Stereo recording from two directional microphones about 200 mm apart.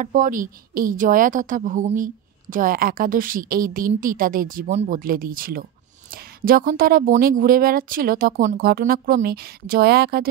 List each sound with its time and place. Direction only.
0.0 s a woman's voice: 40° right (ahead or behind)